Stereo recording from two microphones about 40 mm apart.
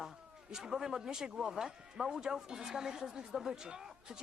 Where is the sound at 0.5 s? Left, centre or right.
Centre.